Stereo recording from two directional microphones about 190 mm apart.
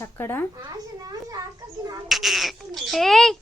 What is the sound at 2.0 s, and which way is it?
Speech, centre (ahead or behind).